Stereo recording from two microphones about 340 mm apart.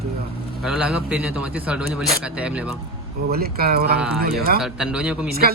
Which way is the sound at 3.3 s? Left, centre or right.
Right.